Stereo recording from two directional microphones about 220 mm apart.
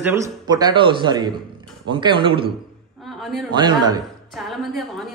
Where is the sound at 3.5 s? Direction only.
20° right (ahead or behind).